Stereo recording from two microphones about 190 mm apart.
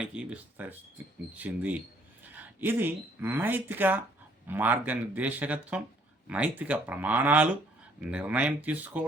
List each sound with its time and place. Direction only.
0.0 s speech: 5° right (ahead or behind)